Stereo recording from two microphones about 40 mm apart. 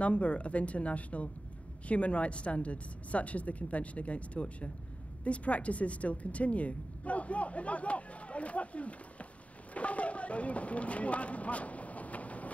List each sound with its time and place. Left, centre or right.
0.0 s a woman's voice: left